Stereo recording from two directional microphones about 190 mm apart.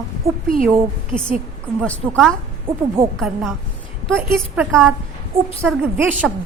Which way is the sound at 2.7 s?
10° right (ahead or behind).